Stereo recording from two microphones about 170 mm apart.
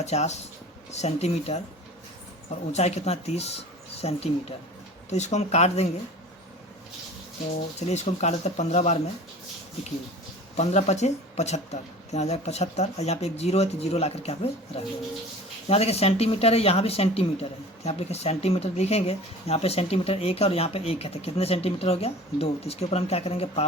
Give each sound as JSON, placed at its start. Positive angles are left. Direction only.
{"t": 0.0, "sound": "speech", "side_deg": 40}
{"t": 7.8, "sound": "speech", "side_deg": 40}
{"t": 10.6, "sound": "speech", "side_deg": 40}